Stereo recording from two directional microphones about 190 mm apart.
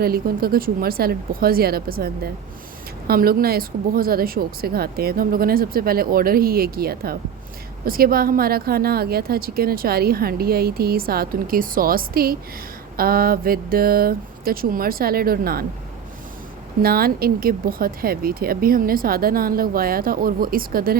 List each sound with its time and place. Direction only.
0.0 s a woman's voice: 50° right (ahead or behind)
16.8 s a woman's voice: 50° right (ahead or behind)